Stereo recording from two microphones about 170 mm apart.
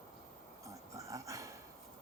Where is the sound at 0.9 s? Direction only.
20° right (ahead or behind).